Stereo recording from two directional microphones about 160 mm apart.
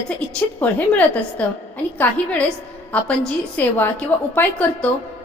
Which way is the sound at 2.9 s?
10° left (ahead or behind).